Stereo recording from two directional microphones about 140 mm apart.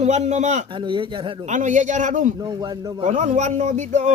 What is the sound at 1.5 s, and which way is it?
A man's voice, 60° right (ahead or behind).